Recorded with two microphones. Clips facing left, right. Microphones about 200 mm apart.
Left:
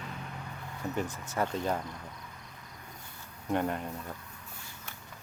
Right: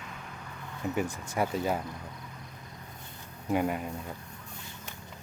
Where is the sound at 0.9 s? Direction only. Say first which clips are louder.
Right 2 dB; 10° right (ahead or behind).